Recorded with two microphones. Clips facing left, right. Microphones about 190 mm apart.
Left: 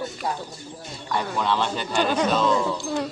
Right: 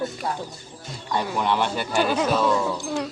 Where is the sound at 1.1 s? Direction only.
15° right (ahead or behind).